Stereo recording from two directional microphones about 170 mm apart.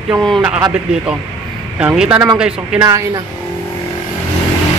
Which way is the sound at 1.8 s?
10° right (ahead or behind).